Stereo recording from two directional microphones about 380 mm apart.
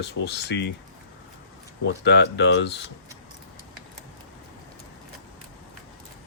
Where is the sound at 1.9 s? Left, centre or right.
Left.